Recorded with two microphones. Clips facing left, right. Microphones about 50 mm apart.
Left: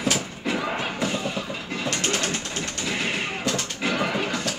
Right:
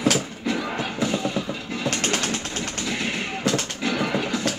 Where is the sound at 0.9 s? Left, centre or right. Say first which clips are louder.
Right 2 dB; centre.